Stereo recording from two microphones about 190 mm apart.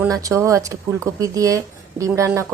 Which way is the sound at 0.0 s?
15° right (ahead or behind).